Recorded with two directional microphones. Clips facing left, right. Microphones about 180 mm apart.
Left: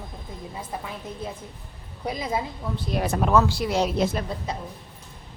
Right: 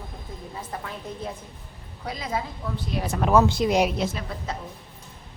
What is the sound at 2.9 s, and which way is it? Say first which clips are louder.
Speech: left 4 dB; 50° left (ahead or behind).